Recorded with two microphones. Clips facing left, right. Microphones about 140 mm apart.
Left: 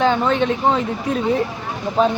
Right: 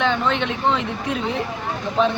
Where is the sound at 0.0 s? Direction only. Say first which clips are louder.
Left 4 dB; 40° left (ahead or behind).